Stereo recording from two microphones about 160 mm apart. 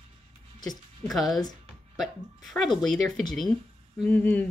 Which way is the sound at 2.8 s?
Centre (ahead or behind).